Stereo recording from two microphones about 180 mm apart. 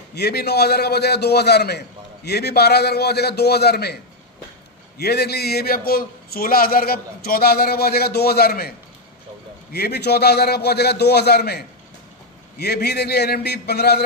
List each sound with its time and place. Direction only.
0.1 s a man's voice: 65° left (ahead or behind)